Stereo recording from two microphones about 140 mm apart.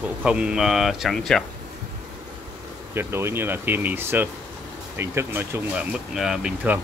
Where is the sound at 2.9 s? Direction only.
15° right (ahead or behind).